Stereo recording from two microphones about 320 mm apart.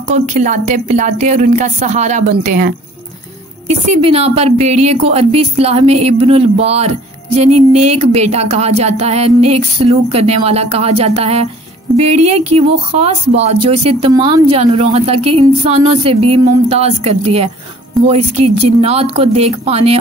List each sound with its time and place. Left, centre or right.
0.1 s speech: right